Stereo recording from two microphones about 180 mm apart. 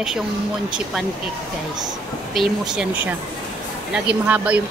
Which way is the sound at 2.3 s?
5° right (ahead or behind).